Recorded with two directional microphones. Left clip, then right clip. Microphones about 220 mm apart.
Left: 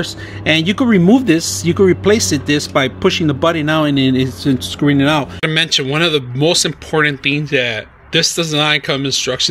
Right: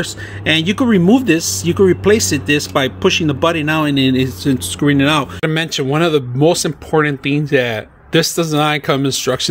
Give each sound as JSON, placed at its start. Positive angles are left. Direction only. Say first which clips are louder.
{"t": 0.0, "sound": "speech", "louder": "left 1 dB", "side_deg": 5}
{"t": 5.4, "sound": "speech", "louder": "left 3 dB", "side_deg": -15}